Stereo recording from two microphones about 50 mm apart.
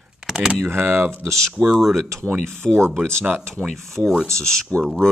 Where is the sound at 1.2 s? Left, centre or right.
Centre.